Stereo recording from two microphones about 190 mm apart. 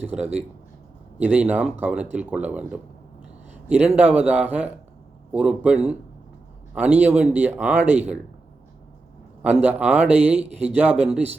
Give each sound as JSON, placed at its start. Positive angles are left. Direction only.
{"t": 1.2, "sound": "a man's voice", "side_deg": -5}
{"t": 9.4, "sound": "a man's voice", "side_deg": -5}